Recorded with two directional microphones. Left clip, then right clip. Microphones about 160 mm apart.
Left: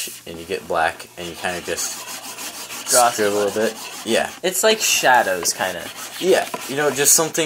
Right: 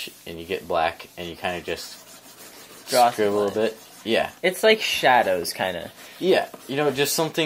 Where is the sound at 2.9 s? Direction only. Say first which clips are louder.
Left 2 dB; 20° right (ahead or behind).